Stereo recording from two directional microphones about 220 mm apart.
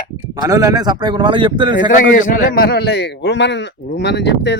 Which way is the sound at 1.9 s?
35° left (ahead or behind).